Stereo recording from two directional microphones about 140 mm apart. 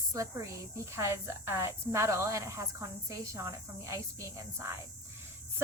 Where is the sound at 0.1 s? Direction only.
20° right (ahead or behind).